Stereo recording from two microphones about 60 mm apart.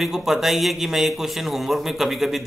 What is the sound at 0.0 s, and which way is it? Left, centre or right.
A man's voice, centre.